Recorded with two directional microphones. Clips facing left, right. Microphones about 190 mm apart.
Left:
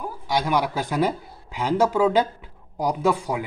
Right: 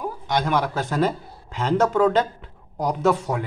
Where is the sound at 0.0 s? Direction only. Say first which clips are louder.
Right 1 dB; 10° left (ahead or behind).